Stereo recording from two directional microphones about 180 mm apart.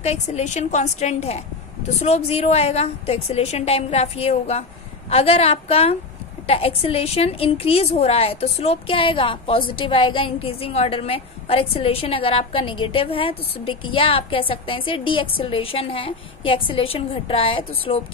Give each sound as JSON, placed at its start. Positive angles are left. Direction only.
{"t": 0.0, "sound": "a woman's voice", "side_deg": 35}